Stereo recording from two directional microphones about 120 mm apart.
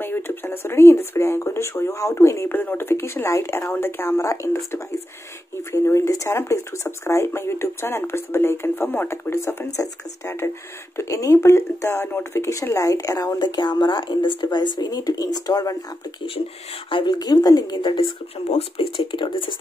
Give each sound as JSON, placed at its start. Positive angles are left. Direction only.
{"t": 0.0, "sound": "speech", "side_deg": 15}
{"t": 5.7, "sound": "speech", "side_deg": 20}
{"t": 16.9, "sound": "a woman's voice", "side_deg": 35}
{"t": 18.5, "sound": "speech", "side_deg": 50}